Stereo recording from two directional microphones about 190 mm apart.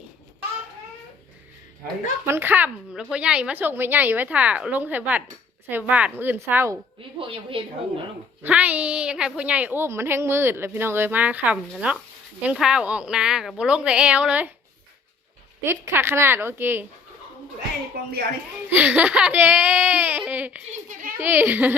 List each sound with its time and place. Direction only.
2.2 s a woman's voice: 10° right (ahead or behind)
7.2 s a woman's voice: 30° right (ahead or behind)
8.4 s a woman's voice: 5° right (ahead or behind)
15.6 s a woman's voice: 10° right (ahead or behind)
18.7 s a woman's voice: 10° right (ahead or behind)
20.9 s a sound: 45° right (ahead or behind)
21.2 s a woman's voice: 10° right (ahead or behind)